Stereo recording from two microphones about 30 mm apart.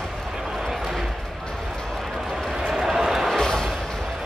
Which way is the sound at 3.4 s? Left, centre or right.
Centre.